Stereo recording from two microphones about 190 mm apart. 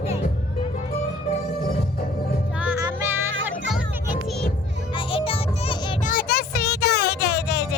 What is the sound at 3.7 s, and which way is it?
Music, centre (ahead or behind).